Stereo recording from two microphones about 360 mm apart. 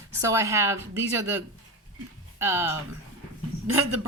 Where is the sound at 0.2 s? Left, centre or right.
Centre.